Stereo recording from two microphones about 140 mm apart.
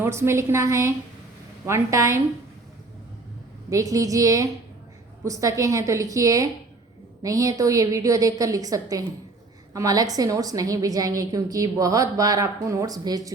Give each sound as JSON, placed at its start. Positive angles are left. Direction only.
{"t": 0.0, "sound": "a woman's voice", "side_deg": -20}
{"t": 3.7, "sound": "a woman's voice", "side_deg": -25}